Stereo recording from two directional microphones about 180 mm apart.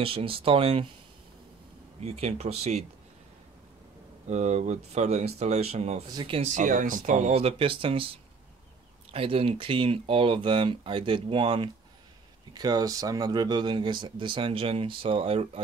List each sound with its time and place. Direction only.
0.0 s speech: 30° right (ahead or behind)
2.0 s speech: 35° right (ahead or behind)
4.3 s speech: 40° right (ahead or behind)
6.5 s speech: 45° right (ahead or behind)